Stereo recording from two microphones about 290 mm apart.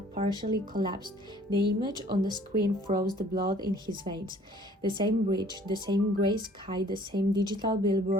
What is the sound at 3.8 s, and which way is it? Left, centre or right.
Speech, centre.